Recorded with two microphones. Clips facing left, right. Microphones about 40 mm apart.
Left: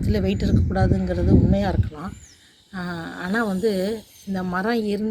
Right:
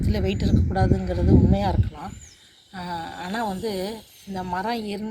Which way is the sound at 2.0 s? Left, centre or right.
Centre.